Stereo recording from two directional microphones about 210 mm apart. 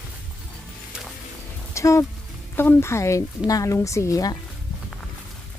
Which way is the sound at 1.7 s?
15° left (ahead or behind).